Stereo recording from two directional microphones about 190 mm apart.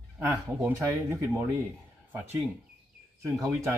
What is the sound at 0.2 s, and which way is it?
Speech, 15° right (ahead or behind).